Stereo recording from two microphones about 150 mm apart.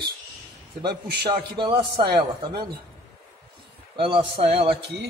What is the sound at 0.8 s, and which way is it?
Speech, 90° right.